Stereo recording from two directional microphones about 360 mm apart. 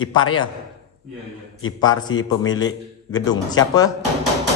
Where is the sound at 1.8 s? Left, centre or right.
Centre.